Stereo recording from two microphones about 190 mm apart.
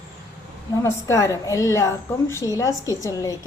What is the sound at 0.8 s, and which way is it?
A woman's voice, 15° left (ahead or behind).